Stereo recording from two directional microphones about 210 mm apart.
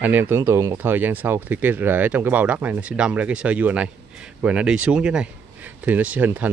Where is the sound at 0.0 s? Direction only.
10° right (ahead or behind).